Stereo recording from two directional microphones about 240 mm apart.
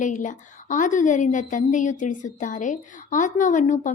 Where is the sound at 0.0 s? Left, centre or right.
Left.